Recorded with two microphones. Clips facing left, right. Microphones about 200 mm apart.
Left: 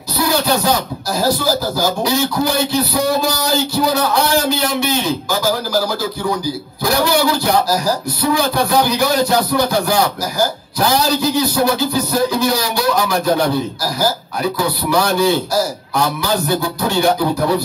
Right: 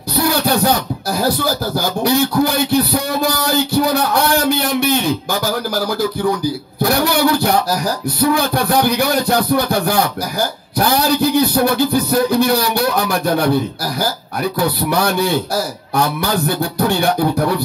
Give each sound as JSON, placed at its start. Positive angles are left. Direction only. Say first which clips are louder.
{"t": 0.2, "sound": "speech", "louder": "right 1 dB", "side_deg": -55}
{"t": 6.8, "sound": "a man's voice", "louder": "right 1 dB", "side_deg": -60}
{"t": 14.6, "sound": "a man's voice", "louder": "right 1 dB", "side_deg": -55}